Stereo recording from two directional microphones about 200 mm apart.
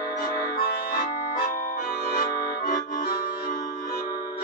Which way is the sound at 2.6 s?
45° left (ahead or behind).